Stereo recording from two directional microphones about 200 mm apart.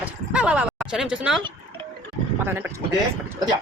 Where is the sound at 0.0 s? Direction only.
5° right (ahead or behind).